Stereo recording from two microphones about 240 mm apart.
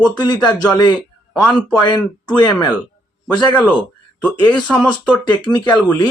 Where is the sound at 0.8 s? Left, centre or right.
Centre.